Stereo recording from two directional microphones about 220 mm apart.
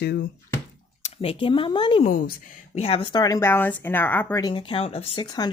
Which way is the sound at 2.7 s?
25° left (ahead or behind).